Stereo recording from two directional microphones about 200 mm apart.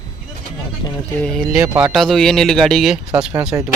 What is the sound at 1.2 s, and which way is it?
Speech, centre (ahead or behind).